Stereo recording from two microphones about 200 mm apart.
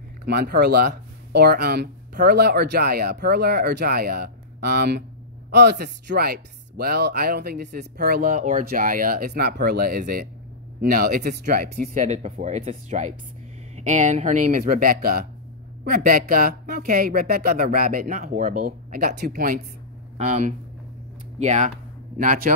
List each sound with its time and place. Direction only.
0.2 s speech: 50° right (ahead or behind)
20.2 s speech: 35° right (ahead or behind)